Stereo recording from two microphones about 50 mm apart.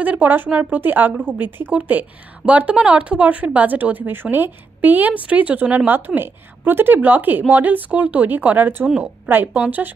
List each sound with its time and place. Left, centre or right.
0.0 s a woman's voice: right
0.7 s speech: right
5.9 s speech: right